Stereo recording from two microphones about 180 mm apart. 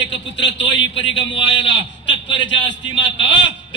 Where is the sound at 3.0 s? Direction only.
85° left.